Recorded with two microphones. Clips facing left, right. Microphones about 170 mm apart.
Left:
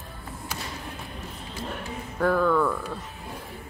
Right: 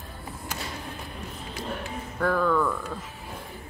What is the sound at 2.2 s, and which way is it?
Speech, 5° left (ahead or behind).